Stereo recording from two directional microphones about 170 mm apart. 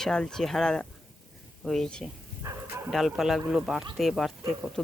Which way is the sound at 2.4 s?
15° right (ahead or behind).